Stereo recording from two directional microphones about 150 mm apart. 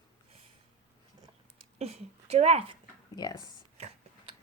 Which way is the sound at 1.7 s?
45° right (ahead or behind).